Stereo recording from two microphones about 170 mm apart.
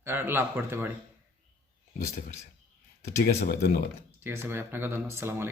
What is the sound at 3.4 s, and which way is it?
Speech, 65° left (ahead or behind).